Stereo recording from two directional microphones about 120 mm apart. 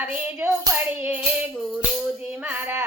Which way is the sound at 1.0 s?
15° right (ahead or behind).